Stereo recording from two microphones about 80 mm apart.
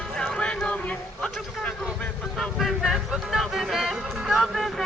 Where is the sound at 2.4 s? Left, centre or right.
Centre.